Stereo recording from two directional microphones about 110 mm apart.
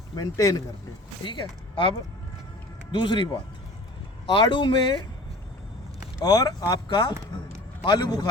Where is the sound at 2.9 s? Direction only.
45° left (ahead or behind).